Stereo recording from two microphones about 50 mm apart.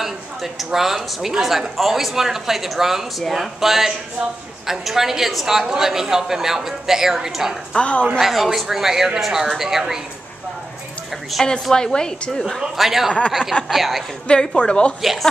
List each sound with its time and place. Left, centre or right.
0.0 s a sound: centre
1.2 s a woman's voice: centre
7.7 s a woman's voice: left
8.2 s a woman's voice: centre
11.3 s speech: centre
11.7 s a woman's voice: centre
12.5 s speech: centre
14.2 s a woman's voice: centre
15.0 s speech: centre